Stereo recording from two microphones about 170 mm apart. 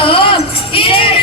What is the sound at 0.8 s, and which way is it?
Music, 30° left (ahead or behind).